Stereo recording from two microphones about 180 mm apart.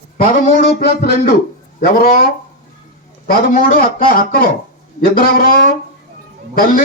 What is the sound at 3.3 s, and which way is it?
A man's voice, 55° left (ahead or behind).